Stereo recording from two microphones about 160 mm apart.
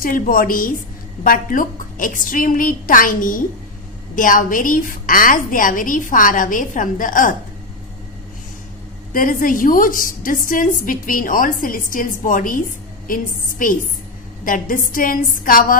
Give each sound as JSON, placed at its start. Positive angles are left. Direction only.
{"t": 0.0, "sound": "a woman's voice", "side_deg": 60}
{"t": 9.1, "sound": "a woman's voice", "side_deg": 60}